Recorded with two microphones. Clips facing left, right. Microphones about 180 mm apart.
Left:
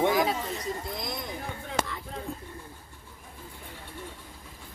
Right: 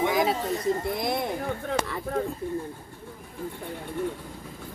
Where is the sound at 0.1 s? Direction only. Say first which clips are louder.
Right 1 dB; 25° right (ahead or behind).